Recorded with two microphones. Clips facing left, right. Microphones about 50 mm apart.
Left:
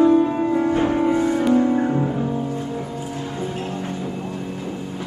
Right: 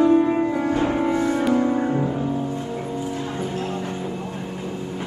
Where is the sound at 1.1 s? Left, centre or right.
Right.